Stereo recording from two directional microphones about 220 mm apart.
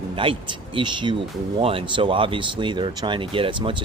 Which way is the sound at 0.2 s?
25° right (ahead or behind).